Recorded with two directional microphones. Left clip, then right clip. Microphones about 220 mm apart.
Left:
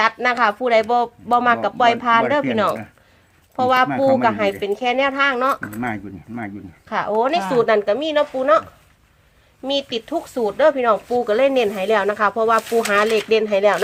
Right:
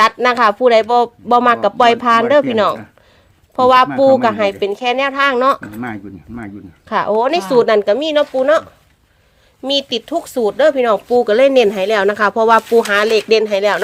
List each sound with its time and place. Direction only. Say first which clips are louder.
0.0 s a woman's voice: right 5 dB; 45° right (ahead or behind)
5.5 s speech: even; 10° left (ahead or behind)
6.8 s speech: right 5 dB; 40° right (ahead or behind)
9.6 s speech: right 5 dB; 40° right (ahead or behind)